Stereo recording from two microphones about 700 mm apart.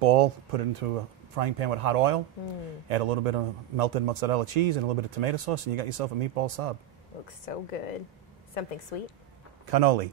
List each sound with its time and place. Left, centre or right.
0.0 s a man's voice: right
7.2 s speech: left